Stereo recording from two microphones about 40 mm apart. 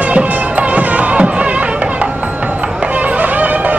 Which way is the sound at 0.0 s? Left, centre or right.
Right.